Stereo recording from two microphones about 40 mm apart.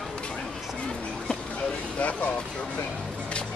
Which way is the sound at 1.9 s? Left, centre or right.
Left.